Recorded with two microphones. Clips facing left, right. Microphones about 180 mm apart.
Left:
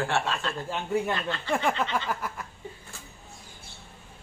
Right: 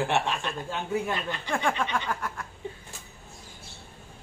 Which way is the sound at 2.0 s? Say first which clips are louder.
Even; 5° left (ahead or behind).